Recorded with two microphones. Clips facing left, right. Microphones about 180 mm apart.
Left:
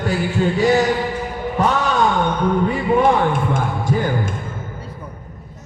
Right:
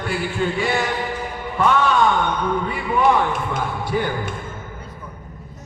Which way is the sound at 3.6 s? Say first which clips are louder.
Left 2 dB; 45° left (ahead or behind).